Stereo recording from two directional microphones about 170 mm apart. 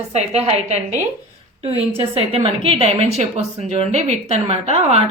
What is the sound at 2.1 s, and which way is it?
A woman's voice, 35° right (ahead or behind).